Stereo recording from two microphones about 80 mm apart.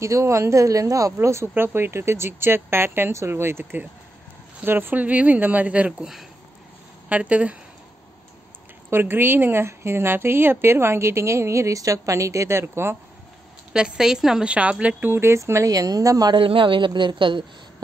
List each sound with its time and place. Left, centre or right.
0.0 s a woman's voice: right; by 7.5 s centre
8.9 s a woman's voice: right
13.7 s a woman's voice: centre; by 15.7 s right
15.7 s a woman's voice: right
16.3 s a woman's voice: right